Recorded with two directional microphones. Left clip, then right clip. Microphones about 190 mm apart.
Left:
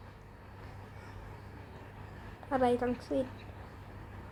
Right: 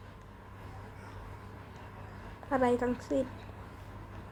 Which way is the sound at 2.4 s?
Centre (ahead or behind).